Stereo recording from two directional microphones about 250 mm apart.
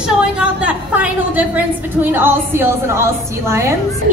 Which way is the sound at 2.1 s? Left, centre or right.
Centre.